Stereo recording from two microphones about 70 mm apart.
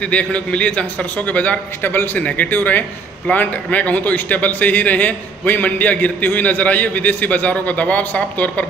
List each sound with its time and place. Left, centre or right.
0.0 s a man's voice: centre
1.8 s a man's voice: left